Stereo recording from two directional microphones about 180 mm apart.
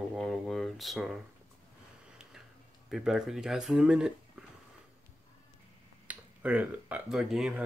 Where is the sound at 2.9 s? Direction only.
Centre (ahead or behind).